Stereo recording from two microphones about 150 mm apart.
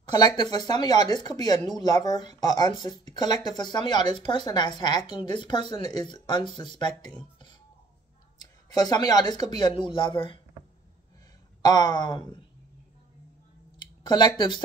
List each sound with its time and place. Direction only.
0.1 s a woman's voice: 30° left (ahead or behind)
7.2 s music: 30° left (ahead or behind)
8.4 s speech: 25° left (ahead or behind)
11.6 s speech: 25° left (ahead or behind)
13.7 s a sound: 30° left (ahead or behind)